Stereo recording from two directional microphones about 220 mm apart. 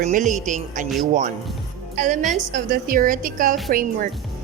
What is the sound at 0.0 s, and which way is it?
Speech, 35° right (ahead or behind).